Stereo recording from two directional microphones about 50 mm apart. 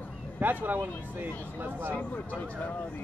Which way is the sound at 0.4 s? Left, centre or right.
Right.